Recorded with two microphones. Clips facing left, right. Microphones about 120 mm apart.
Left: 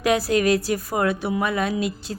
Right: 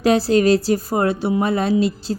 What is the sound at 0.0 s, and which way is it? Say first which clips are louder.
A woman's voice: right 5 dB; 30° right (ahead or behind).